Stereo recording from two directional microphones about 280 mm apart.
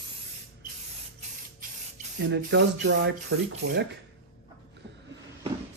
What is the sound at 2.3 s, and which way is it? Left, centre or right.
Speech, right.